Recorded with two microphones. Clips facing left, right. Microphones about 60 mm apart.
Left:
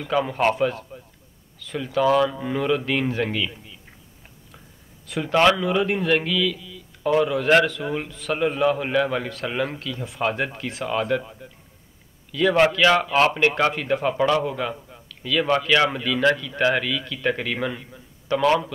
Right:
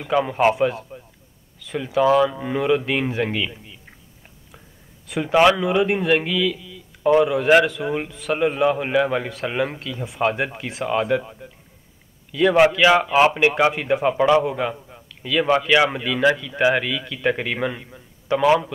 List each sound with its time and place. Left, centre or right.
0.0 s a man's voice: centre
5.0 s a man's voice: centre